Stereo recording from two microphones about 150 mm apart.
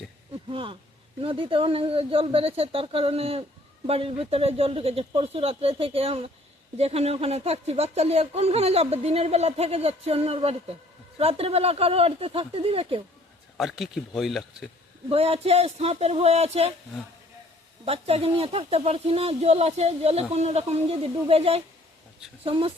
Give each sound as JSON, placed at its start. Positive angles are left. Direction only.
{"t": 0.4, "sound": "speech", "side_deg": -35}
{"t": 13.6, "sound": "speech", "side_deg": 0}
{"t": 15.1, "sound": "speech", "side_deg": -40}
{"t": 17.8, "sound": "speech", "side_deg": -40}